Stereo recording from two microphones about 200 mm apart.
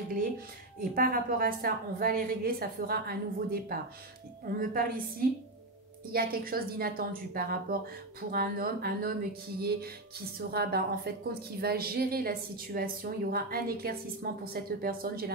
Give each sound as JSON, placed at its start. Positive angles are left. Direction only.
{"t": 0.7, "sound": "a woman's voice", "side_deg": -45}
{"t": 6.1, "sound": "a woman's voice", "side_deg": -45}